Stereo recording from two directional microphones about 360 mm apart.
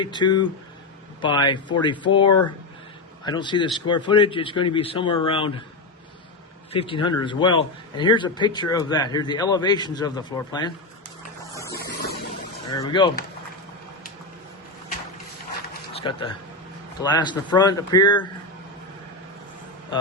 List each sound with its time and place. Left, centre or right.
0.0 s a man's voice: centre
6.7 s a man's voice: centre
12.7 s a man's voice: centre
15.9 s a man's voice: centre